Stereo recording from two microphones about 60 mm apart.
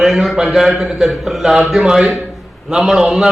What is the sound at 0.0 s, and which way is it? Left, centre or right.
A man's voice, centre.